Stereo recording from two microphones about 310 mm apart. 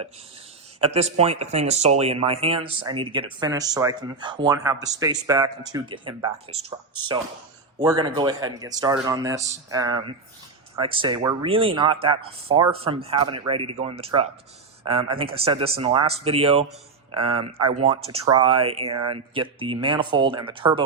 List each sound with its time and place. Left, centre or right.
0.8 s speech: centre